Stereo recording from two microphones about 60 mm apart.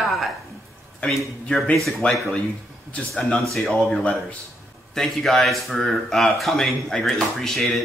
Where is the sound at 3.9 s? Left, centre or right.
Left.